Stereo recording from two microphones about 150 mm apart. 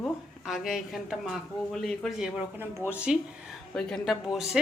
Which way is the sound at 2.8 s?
15° right (ahead or behind).